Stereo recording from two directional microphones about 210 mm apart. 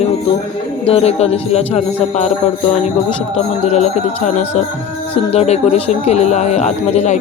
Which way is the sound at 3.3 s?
30° left (ahead or behind).